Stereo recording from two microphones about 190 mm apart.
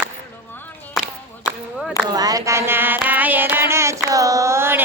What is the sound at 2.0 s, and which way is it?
Child singing, 20° right (ahead or behind).